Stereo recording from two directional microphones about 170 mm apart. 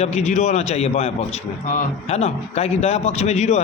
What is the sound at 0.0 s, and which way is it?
A man's voice, 40° left (ahead or behind).